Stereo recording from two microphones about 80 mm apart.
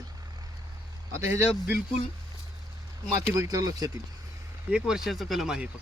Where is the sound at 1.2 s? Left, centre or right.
Right.